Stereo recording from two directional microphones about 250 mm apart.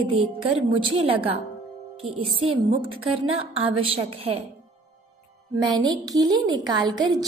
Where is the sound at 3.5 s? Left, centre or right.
Right.